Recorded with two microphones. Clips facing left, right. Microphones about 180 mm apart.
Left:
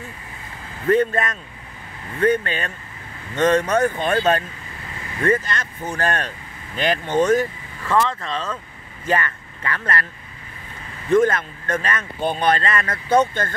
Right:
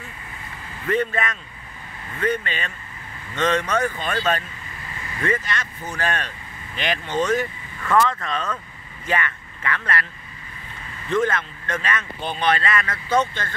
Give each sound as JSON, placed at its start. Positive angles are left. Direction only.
{"t": 0.8, "sound": "speech", "side_deg": 40}
{"t": 7.8, "sound": "speech", "side_deg": 30}
{"t": 11.1, "sound": "speech", "side_deg": 45}